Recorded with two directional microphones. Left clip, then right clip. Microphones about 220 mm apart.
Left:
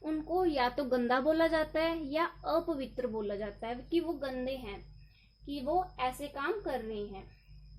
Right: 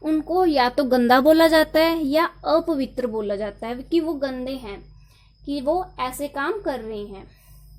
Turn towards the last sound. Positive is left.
turn(degrees=-40)  # may be behind; listen again after turning